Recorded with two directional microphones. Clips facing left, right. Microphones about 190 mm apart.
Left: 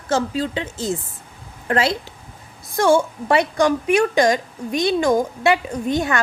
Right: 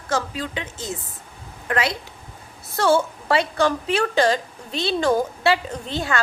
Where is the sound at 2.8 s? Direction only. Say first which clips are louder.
Left 3 dB; 15° left (ahead or behind).